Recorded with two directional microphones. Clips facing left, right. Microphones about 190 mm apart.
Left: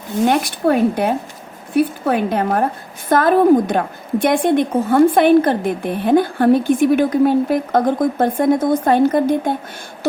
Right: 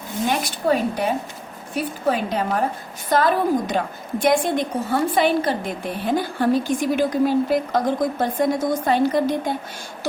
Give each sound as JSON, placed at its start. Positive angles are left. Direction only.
{"t": 0.3, "sound": "a woman's voice", "side_deg": 55}